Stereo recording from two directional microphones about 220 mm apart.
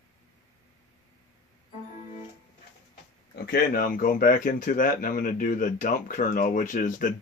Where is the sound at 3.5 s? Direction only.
40° left (ahead or behind).